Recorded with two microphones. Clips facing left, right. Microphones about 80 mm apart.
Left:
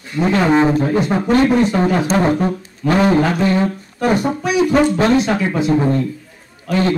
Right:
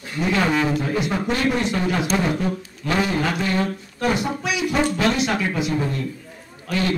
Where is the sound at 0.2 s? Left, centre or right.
Left.